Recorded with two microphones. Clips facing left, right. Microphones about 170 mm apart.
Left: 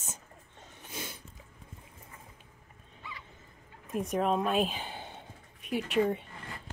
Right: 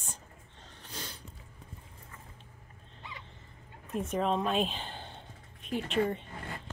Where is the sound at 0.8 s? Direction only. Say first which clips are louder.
Left 2 dB; 10° left (ahead or behind).